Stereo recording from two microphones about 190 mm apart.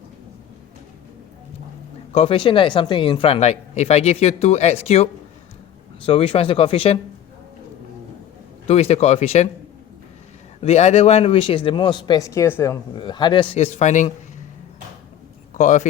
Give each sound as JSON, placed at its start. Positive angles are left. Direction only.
{"t": 2.1, "sound": "speech", "side_deg": 30}
{"t": 6.1, "sound": "speech", "side_deg": 30}
{"t": 8.6, "sound": "speech", "side_deg": 35}
{"t": 10.6, "sound": "speech", "side_deg": 35}
{"t": 13.0, "sound": "speech", "side_deg": 25}
{"t": 15.5, "sound": "speech", "side_deg": 40}